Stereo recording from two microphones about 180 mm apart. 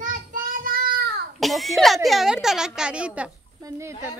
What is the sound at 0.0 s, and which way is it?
Child singing, 50° right (ahead or behind).